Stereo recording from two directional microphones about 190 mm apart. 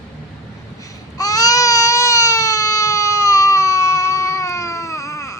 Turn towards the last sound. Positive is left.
turn(degrees=15)  # may be behind; listen again after turning